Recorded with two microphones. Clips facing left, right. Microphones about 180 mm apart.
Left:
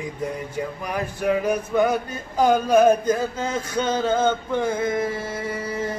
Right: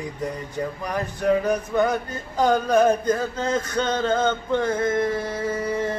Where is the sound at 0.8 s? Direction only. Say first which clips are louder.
Right 2 dB; 10° left (ahead or behind).